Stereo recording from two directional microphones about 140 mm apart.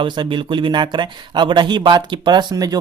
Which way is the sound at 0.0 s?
35° right (ahead or behind).